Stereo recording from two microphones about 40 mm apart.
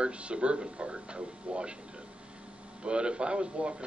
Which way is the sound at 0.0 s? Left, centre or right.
Right.